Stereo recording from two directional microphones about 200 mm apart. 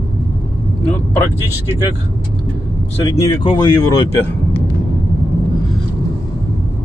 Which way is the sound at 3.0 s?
20° left (ahead or behind).